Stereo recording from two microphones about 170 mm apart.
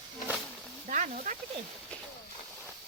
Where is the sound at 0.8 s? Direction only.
45° right (ahead or behind).